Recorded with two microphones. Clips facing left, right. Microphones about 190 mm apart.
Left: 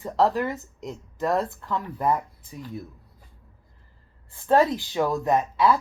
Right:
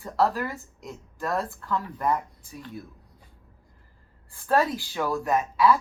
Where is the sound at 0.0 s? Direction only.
20° left (ahead or behind).